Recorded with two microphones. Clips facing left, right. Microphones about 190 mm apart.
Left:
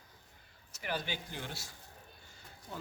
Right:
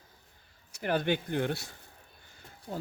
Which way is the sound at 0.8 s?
55° right (ahead or behind).